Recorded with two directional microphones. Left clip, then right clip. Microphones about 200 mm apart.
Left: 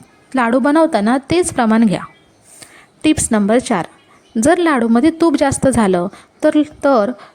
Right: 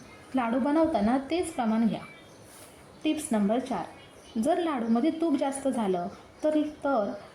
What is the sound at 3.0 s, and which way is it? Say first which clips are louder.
A woman's voice: left 13 dB; 40° left (ahead or behind).